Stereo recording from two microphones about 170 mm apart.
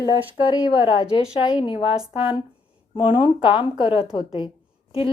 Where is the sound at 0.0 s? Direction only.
25° left (ahead or behind).